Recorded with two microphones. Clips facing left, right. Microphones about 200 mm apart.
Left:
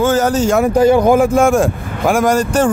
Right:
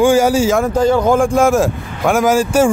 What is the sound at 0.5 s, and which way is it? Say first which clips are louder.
A man's voice: left 3 dB; 10° left (ahead or behind).